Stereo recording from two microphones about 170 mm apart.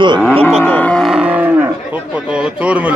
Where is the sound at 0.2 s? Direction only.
10° left (ahead or behind).